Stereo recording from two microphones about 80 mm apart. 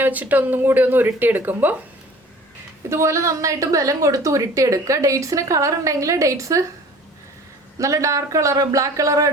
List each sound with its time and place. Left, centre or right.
0.0 s speech: right
2.9 s a woman's voice: right
7.8 s a woman's voice: right